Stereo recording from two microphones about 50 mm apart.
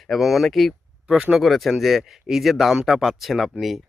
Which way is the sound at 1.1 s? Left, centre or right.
Centre.